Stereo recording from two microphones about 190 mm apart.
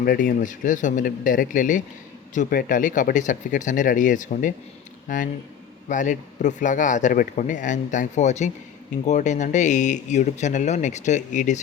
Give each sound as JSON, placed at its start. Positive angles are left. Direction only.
{"t": 0.0, "sound": "speech", "side_deg": 50}